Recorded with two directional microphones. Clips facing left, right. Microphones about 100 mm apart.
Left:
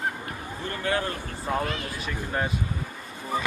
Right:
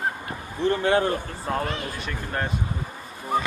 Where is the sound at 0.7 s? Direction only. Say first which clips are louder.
Right 7 dB; 25° right (ahead or behind).